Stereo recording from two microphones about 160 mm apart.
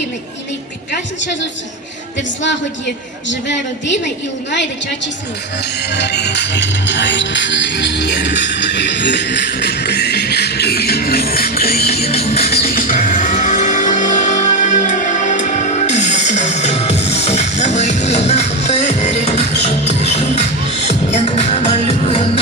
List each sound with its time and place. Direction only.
5.9 s music: 90° left; by 11.9 s 75° left (ahead or behind)
11.9 s music: 40° left (ahead or behind)
12.6 s music: 60° left (ahead or behind); by 22.3 s 35° left (ahead or behind)